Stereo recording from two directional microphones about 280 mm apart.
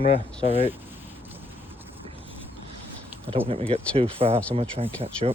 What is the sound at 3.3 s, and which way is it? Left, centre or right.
Speech, right.